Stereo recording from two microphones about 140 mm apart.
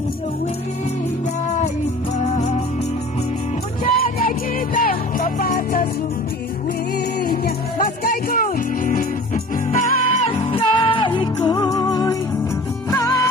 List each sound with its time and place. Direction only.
2.1 s music: 55° left (ahead or behind)
3.9 s music: 90° left
7.2 s music: 90° left; by 10.2 s 70° left (ahead or behind)
10.5 s music: 35° left (ahead or behind)